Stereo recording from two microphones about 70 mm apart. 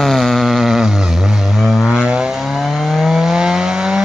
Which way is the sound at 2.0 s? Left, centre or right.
Centre.